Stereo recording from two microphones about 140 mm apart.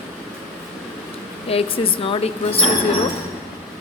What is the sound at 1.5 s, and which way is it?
A woman's voice, 45° left (ahead or behind).